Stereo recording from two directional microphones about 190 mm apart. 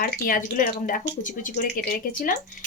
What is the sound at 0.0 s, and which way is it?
A woman's voice, 45° left (ahead or behind).